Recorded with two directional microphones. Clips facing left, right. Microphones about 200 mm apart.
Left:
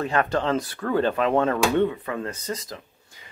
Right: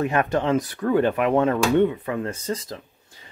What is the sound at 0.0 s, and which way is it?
Speech, 20° right (ahead or behind).